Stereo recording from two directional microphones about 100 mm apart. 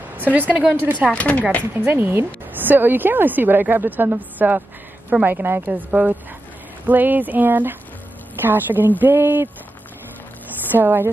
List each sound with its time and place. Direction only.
0.2 s a woman's voice: 15° right (ahead or behind)
1.1 s speech: 15° left (ahead or behind)
1.8 s a woman's voice: 20° right (ahead or behind)
10.7 s a woman's voice: 20° right (ahead or behind)